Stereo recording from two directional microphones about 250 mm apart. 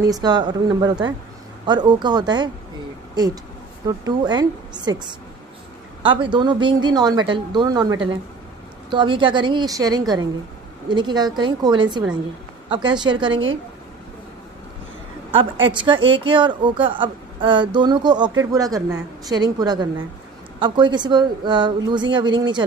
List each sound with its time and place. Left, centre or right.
0.0 s a woman's voice: centre
15.6 s a woman's voice: centre